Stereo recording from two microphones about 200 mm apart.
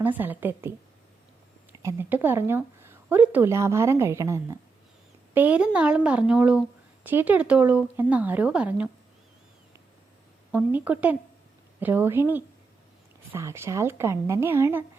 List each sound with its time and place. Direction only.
0.0 s speech: 10° right (ahead or behind)
1.7 s speech: 15° right (ahead or behind)
10.5 s speech: 10° right (ahead or behind)